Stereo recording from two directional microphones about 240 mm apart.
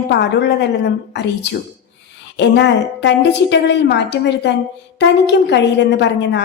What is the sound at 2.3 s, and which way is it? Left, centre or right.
A woman's voice, left.